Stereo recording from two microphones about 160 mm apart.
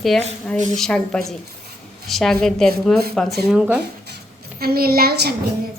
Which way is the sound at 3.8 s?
90° right.